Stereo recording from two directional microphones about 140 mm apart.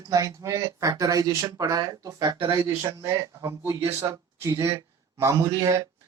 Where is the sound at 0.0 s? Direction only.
25° right (ahead or behind).